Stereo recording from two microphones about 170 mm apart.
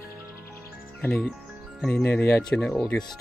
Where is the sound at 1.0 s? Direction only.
5° left (ahead or behind).